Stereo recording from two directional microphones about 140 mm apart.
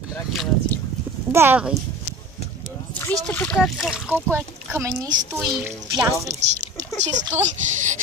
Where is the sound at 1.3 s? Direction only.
15° right (ahead or behind).